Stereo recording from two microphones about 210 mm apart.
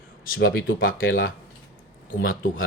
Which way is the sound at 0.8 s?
70° left (ahead or behind).